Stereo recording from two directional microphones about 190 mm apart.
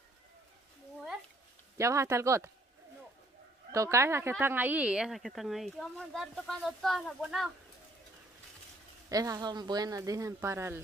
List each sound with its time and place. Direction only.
1.8 s speech: 15° right (ahead or behind)
3.7 s speech: 15° right (ahead or behind)
9.1 s speech: 20° right (ahead or behind)